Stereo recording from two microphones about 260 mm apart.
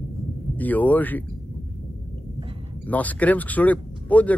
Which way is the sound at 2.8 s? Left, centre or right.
Centre.